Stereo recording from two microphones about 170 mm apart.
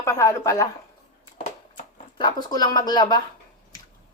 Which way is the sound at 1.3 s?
50° left (ahead or behind).